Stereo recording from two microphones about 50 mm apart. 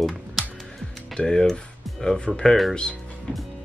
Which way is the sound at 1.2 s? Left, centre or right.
Centre.